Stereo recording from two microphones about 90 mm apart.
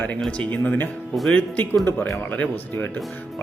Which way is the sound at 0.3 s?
15° left (ahead or behind).